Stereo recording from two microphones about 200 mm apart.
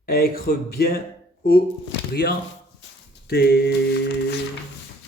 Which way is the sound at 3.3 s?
55° left (ahead or behind).